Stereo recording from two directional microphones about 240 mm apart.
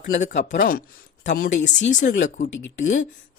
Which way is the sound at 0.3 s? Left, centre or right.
Left.